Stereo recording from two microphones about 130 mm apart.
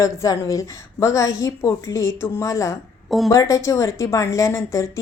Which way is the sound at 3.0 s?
Centre (ahead or behind).